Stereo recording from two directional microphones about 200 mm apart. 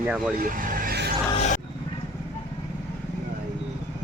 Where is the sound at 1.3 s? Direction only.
35° left (ahead or behind).